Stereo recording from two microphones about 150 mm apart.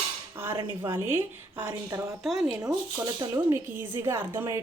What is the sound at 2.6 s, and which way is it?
A woman's voice, 20° right (ahead or behind).